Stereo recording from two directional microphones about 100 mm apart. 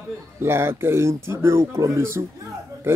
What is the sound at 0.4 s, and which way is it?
Speech, 25° right (ahead or behind).